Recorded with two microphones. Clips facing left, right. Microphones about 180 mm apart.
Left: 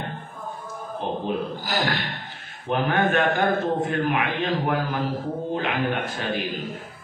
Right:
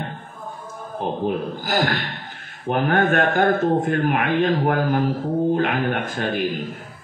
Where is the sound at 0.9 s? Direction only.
55° right (ahead or behind).